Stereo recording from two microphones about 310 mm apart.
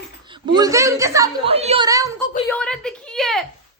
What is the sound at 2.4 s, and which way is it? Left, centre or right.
A woman's voice, centre.